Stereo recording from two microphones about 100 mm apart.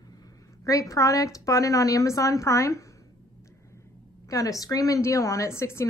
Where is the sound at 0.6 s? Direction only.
35° left (ahead or behind).